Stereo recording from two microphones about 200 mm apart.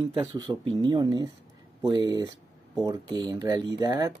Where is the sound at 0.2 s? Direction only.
20° right (ahead or behind).